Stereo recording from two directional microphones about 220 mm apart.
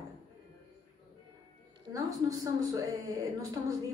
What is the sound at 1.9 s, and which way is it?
A woman's voice, 15° right (ahead or behind).